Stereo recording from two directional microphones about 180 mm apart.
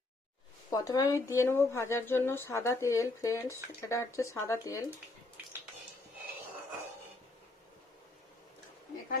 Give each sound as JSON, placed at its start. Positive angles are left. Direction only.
{"t": 0.7, "sound": "a woman's voice", "side_deg": 20}
{"t": 5.4, "sound": "cutlery", "side_deg": -10}